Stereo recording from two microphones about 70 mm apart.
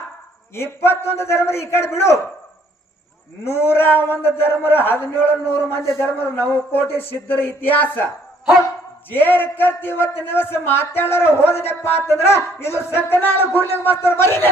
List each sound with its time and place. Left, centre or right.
0.5 s a man's voice: left
3.4 s a man's voice: left
9.0 s a man's voice: left